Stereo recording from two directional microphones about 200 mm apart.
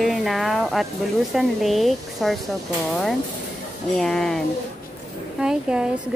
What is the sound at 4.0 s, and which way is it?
Speech, centre (ahead or behind).